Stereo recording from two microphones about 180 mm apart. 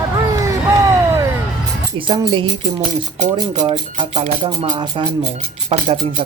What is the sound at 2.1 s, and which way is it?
Speech, 30° right (ahead or behind).